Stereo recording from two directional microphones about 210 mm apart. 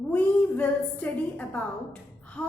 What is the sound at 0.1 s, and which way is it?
A woman's voice, 10° left (ahead or behind).